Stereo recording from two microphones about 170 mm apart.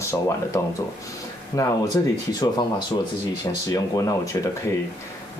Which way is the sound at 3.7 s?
20° left (ahead or behind).